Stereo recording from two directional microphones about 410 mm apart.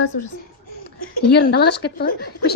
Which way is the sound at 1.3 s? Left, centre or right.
Left.